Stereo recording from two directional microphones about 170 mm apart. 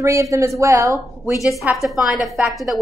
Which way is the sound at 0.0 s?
20° right (ahead or behind).